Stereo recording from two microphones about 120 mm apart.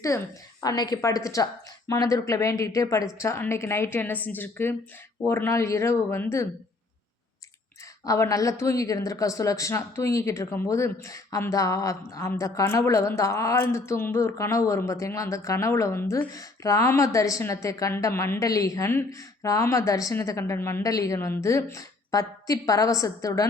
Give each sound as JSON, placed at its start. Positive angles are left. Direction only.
{"t": 0.1, "sound": "a woman's voice", "side_deg": 25}
{"t": 8.0, "sound": "speech", "side_deg": 25}